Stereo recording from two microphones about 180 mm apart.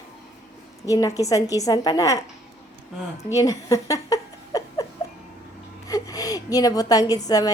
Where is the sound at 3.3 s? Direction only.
20° left (ahead or behind).